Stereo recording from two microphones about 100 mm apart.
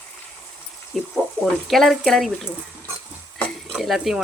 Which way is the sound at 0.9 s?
Centre (ahead or behind).